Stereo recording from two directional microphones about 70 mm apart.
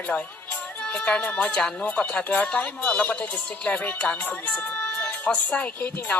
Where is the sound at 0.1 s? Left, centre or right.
Centre.